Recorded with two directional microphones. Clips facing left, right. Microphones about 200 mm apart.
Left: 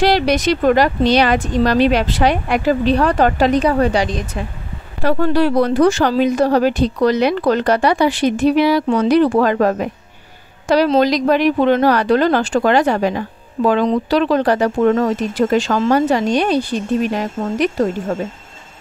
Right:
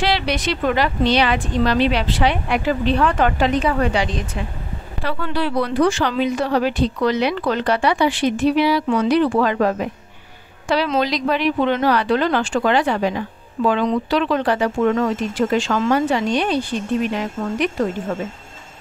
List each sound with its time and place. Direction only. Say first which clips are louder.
0.0 s speech: left 6 dB; 45° left (ahead or behind)